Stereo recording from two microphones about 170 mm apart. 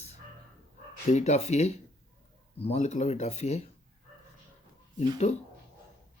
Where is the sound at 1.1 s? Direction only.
40° left (ahead or behind).